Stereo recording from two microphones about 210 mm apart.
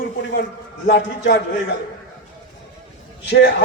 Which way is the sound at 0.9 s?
60° left (ahead or behind).